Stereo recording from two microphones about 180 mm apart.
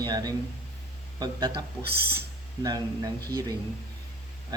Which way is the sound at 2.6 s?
20° right (ahead or behind).